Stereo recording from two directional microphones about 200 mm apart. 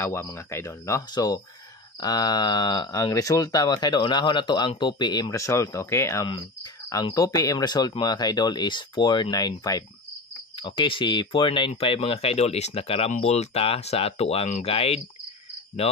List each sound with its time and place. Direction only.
0.0 s speech: 10° left (ahead or behind); by 15.0 s 30° left (ahead or behind)